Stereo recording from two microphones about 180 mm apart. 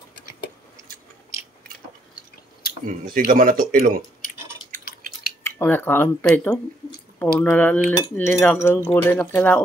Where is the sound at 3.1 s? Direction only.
50° right (ahead or behind).